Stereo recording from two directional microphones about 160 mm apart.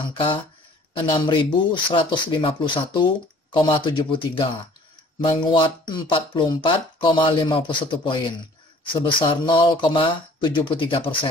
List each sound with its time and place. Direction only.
0.1 s speech: 30° left (ahead or behind)